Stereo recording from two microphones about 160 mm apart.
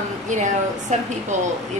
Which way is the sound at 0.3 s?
50° right (ahead or behind).